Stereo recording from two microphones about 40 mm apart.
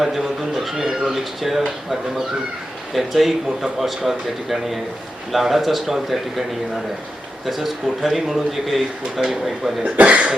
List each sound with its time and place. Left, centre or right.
0.0 s speech: centre
2.9 s speech: centre
7.4 s speech: centre
10.0 s cough: right